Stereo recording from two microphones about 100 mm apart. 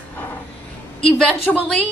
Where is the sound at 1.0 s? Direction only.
10° left (ahead or behind).